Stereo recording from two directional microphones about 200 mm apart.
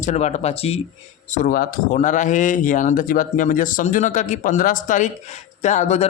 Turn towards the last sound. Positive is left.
turn(degrees=35)  # may be behind; listen again after turning